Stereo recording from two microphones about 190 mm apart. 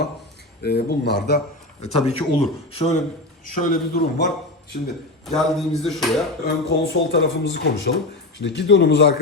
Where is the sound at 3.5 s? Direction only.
45° left (ahead or behind).